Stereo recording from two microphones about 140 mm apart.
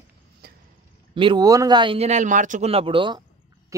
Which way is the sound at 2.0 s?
55° right (ahead or behind).